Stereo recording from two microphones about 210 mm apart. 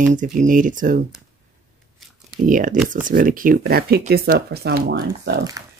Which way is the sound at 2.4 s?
40° right (ahead or behind).